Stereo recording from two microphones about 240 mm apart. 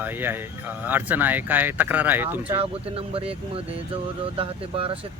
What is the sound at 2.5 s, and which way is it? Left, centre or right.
Speech, right.